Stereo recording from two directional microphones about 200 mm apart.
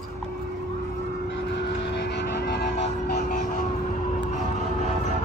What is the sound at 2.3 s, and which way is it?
Vehicle, 55° left (ahead or behind).